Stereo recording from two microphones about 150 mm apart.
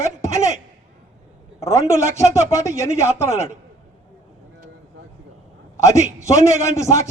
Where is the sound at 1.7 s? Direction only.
20° left (ahead or behind).